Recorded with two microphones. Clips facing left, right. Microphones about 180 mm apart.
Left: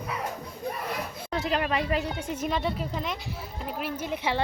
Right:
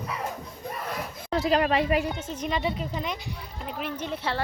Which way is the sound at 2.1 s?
10° left (ahead or behind).